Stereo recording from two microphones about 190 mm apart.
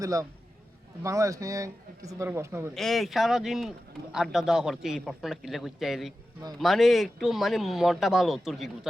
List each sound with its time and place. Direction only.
0.0 s a man's voice: 20° right (ahead or behind)
2.7 s speech: centre (ahead or behind)